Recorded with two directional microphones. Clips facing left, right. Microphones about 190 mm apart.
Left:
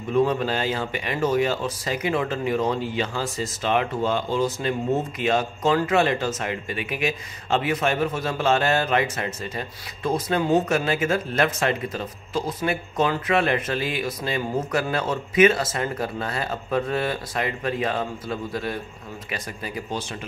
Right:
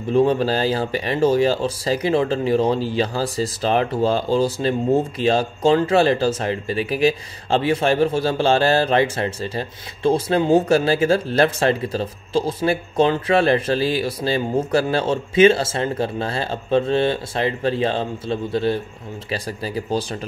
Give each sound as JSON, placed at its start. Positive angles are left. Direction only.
{"t": 0.1, "sound": "speech", "side_deg": -30}